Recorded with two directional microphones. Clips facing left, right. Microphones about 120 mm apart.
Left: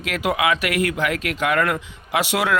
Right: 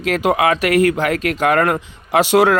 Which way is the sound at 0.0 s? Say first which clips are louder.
Right 6 dB; 35° right (ahead or behind).